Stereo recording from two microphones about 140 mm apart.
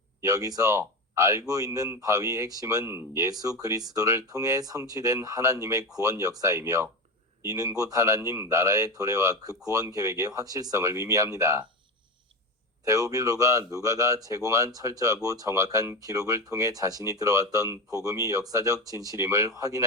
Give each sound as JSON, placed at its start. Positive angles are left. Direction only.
{"t": 0.2, "sound": "speech", "side_deg": -25}
{"t": 12.8, "sound": "speech", "side_deg": -25}